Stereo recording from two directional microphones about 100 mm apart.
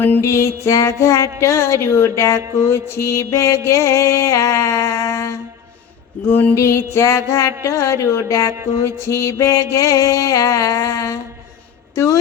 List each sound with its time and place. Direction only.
0.0 s mantra: 25° left (ahead or behind)
6.2 s music: 20° left (ahead or behind)
6.6 s mantra: 30° left (ahead or behind)
6.9 s music: 30° left (ahead or behind)
7.6 s mantra: 30° left (ahead or behind)
9.0 s music: 30° left (ahead or behind)